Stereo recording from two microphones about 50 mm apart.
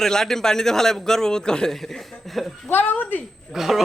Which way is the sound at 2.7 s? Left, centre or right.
Left.